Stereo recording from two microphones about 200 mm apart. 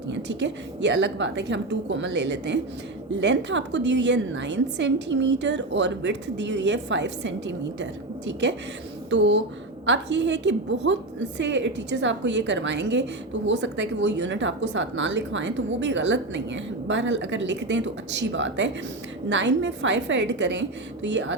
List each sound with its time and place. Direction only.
0.1 s a woman's voice: 60° right (ahead or behind)